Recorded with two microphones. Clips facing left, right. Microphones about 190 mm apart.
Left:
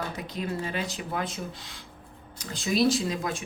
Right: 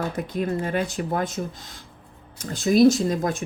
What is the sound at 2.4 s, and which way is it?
Speech, 50° right (ahead or behind).